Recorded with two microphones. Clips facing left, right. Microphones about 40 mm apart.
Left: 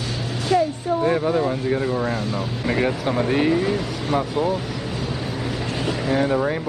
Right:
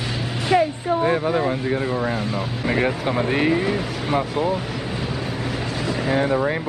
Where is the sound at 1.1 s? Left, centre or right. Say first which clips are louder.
Even; centre.